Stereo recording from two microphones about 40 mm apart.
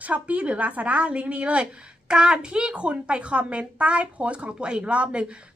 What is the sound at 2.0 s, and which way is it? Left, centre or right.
Speech, right.